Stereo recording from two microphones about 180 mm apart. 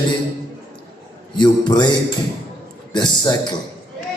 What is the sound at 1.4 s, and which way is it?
Speech, 25° left (ahead or behind).